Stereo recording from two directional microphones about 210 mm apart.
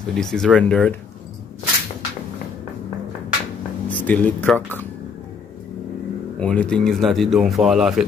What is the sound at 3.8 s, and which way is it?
Speech, 5° left (ahead or behind).